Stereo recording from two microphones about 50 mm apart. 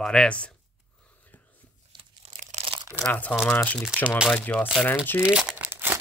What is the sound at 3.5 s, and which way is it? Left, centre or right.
Speech, left.